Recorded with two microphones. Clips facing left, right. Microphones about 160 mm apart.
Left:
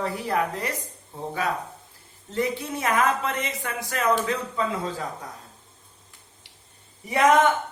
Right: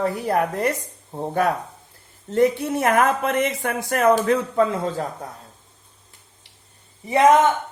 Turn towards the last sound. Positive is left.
turn(degrees=-25)  # may be behind; listen again after turning